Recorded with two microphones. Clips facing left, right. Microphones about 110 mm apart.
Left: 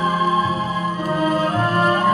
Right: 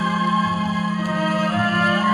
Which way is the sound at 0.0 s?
30° left (ahead or behind).